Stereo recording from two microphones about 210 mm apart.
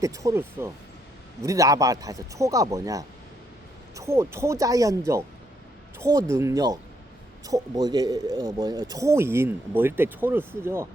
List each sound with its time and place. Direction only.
0.0 s speech: 15° right (ahead or behind)